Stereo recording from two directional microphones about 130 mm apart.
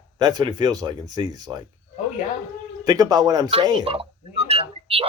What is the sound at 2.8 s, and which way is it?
Speech, 30° right (ahead or behind).